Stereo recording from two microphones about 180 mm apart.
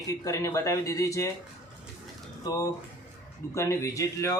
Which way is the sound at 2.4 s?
20° left (ahead or behind).